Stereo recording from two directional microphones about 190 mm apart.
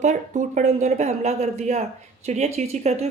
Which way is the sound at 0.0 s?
40° right (ahead or behind).